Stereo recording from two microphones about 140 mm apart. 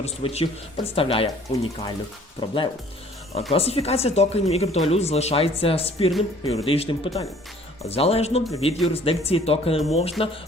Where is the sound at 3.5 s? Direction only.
45° left (ahead or behind).